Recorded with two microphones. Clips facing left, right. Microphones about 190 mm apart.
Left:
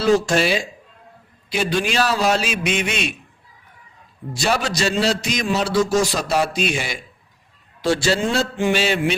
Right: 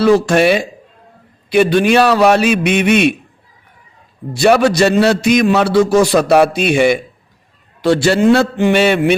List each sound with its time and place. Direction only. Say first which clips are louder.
0.0 s a man's voice: right 7 dB; 60° right (ahead or behind)
4.4 s a man's voice: right 11 dB; 60° right (ahead or behind)